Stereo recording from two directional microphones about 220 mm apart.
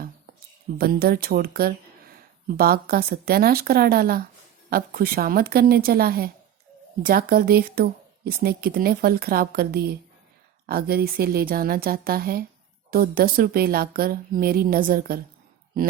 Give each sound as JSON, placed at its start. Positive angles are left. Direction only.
{"t": 0.8, "sound": "speech", "side_deg": -45}